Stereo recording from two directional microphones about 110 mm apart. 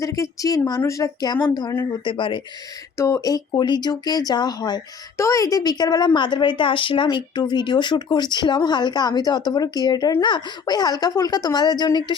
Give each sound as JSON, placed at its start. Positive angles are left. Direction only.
{"t": 0.0, "sound": "speech", "side_deg": 30}
{"t": 2.0, "sound": "speech", "side_deg": 45}
{"t": 3.0, "sound": "speech", "side_deg": 30}
{"t": 5.1, "sound": "speech", "side_deg": 30}